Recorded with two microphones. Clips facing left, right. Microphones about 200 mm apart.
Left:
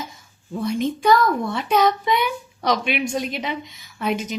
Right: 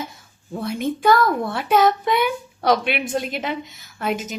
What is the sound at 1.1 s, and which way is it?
Speech, 50° right (ahead or behind).